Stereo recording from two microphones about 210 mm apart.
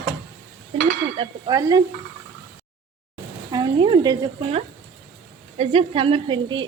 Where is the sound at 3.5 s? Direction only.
20° right (ahead or behind).